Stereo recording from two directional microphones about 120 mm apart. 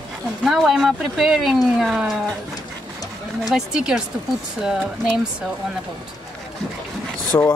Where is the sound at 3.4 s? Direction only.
5° right (ahead or behind).